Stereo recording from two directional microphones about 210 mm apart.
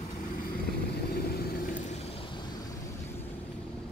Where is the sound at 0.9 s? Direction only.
50° left (ahead or behind).